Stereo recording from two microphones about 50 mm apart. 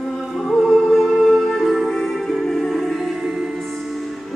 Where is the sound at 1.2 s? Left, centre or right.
Centre.